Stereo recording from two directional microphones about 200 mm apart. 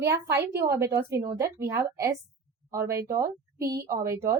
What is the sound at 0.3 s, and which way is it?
A woman's voice, 15° right (ahead or behind).